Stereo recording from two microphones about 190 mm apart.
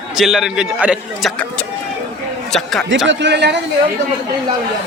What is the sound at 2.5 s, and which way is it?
Speech, centre (ahead or behind).